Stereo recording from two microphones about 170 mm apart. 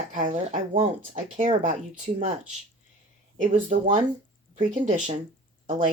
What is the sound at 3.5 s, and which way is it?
Speech, 50° right (ahead or behind).